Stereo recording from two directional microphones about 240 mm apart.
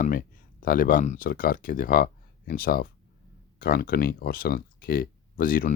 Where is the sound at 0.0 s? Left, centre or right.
Left.